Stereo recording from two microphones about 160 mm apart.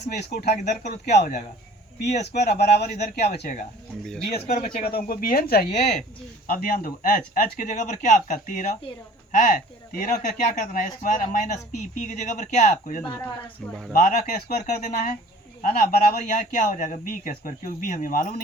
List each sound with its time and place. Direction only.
0.1 s speech: 85° left
0.6 s speech: 50° left (ahead or behind)
2.2 s speech: 90° left
4.0 s speech: 5° left (ahead or behind)
4.4 s speech: 65° left (ahead or behind)
5.6 s speech: 45° left (ahead or behind)
6.5 s speech: 55° left (ahead or behind)
15.6 s speech: 65° left (ahead or behind)